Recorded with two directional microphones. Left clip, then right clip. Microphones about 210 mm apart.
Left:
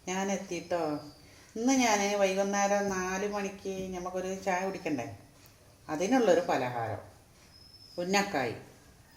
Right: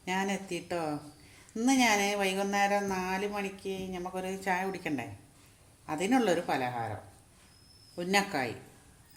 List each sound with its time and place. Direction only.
0.0 s speech: 35° right (ahead or behind)
7.9 s speech: 35° right (ahead or behind)